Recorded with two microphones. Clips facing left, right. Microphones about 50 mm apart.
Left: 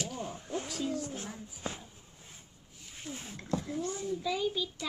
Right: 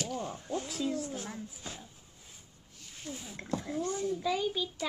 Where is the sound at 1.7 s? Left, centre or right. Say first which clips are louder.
Left 9 dB; left.